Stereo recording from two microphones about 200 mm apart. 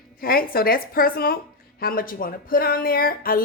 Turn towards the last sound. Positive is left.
turn(degrees=45)  # may be behind; listen again after turning